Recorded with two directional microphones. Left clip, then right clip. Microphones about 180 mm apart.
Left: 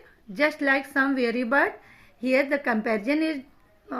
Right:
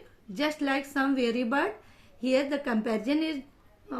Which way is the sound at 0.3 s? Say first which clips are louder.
Left 6 dB; 30° left (ahead or behind).